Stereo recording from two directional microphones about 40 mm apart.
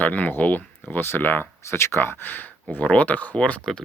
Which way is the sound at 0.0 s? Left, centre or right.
Left.